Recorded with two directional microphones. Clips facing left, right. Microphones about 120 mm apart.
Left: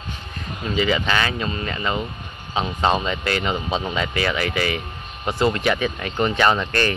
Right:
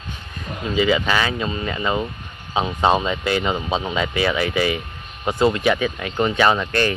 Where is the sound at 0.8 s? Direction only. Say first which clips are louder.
Right 2 dB; 10° right (ahead or behind).